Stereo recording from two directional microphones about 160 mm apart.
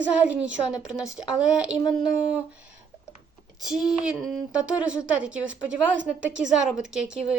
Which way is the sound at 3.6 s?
5° right (ahead or behind).